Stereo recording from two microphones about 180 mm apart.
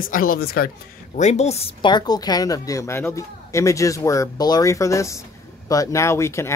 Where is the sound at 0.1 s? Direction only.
55° left (ahead or behind).